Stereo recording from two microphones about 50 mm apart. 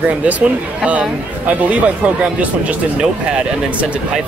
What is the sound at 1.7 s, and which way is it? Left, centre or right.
Speech, right.